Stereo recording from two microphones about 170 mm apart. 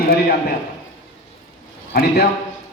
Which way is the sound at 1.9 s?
65° left (ahead or behind).